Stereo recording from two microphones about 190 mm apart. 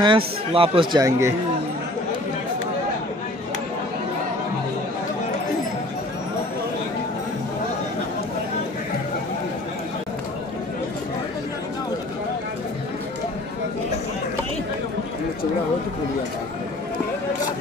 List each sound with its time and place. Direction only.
0.0 s speech: 25° right (ahead or behind)